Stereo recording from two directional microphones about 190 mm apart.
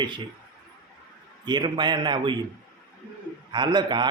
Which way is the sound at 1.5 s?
25° right (ahead or behind).